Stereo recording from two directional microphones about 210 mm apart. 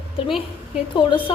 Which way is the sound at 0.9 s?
20° left (ahead or behind).